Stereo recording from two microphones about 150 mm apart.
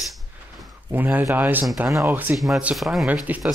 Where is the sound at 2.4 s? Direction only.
Centre (ahead or behind).